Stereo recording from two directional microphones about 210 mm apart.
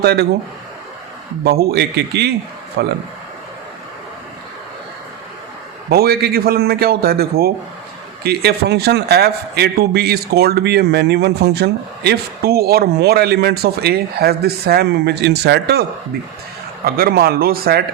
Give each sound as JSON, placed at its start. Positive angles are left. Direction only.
{"t": 0.0, "sound": "a man's voice", "side_deg": -50}
{"t": 1.5, "sound": "a man's voice", "side_deg": -50}
{"t": 5.9, "sound": "a man's voice", "side_deg": -45}
{"t": 16.8, "sound": "a man's voice", "side_deg": -45}